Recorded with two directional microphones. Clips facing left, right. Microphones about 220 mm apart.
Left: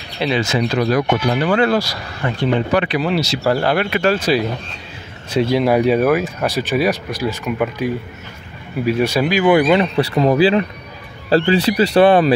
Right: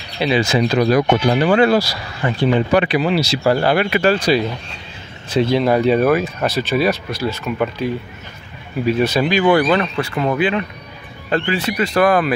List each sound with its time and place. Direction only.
0.2 s speech: 5° right (ahead or behind)
3.0 s speech: centre (ahead or behind); by 9.8 s 15° left (ahead or behind)
9.9 s speech: 35° left (ahead or behind)